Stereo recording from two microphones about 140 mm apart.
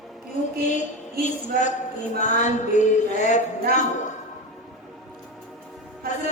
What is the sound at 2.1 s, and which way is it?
A man's voice, 60° left (ahead or behind).